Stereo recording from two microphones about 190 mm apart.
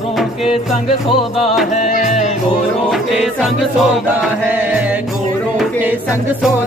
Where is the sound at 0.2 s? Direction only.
Centre (ahead or behind).